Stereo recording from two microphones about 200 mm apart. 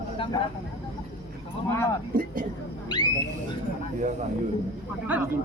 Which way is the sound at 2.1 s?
45° right (ahead or behind).